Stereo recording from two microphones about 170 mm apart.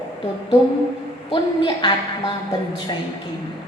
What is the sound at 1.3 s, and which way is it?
A woman's voice, 30° left (ahead or behind).